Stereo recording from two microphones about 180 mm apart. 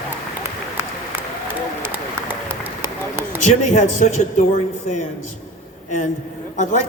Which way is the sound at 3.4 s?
40° left (ahead or behind).